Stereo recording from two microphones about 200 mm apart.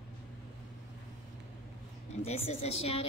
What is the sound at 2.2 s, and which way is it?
Speech, 30° left (ahead or behind).